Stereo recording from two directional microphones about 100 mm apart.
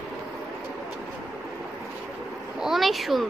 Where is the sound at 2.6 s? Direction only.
Centre (ahead or behind).